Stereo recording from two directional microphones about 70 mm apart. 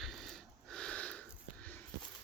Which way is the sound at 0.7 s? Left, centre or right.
Centre.